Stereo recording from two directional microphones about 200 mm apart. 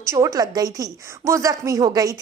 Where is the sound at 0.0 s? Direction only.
15° right (ahead or behind).